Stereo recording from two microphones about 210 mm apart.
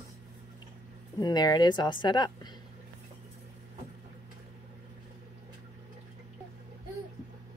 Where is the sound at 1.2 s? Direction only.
20° left (ahead or behind).